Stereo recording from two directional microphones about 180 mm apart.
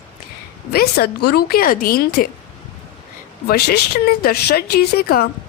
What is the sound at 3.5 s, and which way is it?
Speech, 60° left (ahead or behind).